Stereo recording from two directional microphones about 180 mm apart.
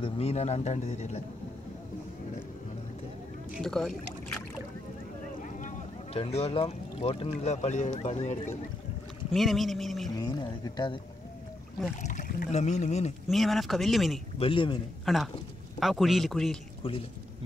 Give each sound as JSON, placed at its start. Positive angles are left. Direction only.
{"t": 0.0, "sound": "speech", "side_deg": 35}
{"t": 3.5, "sound": "speech", "side_deg": 5}
{"t": 6.1, "sound": "speech", "side_deg": 35}
{"t": 9.3, "sound": "speech", "side_deg": 0}
{"t": 10.1, "sound": "speech", "side_deg": 25}
{"t": 12.0, "sound": "speech", "side_deg": 45}
{"t": 13.3, "sound": "speech", "side_deg": 0}
{"t": 14.4, "sound": "speech", "side_deg": 30}
{"t": 15.1, "sound": "speech", "side_deg": 0}